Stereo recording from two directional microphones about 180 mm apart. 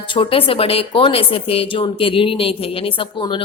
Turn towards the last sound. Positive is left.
turn(degrees=25)  # may be behind; listen again after turning